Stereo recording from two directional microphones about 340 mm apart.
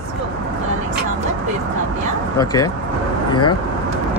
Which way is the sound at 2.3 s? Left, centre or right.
Centre.